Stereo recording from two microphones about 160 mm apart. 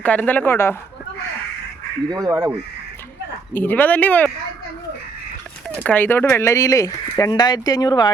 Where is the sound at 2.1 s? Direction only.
20° right (ahead or behind).